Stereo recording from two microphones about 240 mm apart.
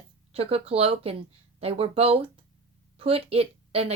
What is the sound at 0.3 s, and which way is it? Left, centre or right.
Speech, right.